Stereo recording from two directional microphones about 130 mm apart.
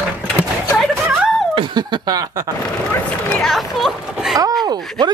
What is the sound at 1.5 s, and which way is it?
Chuckle, 40° right (ahead or behind).